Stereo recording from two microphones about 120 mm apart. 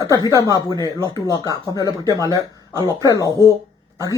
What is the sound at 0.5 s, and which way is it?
Speech, 30° left (ahead or behind).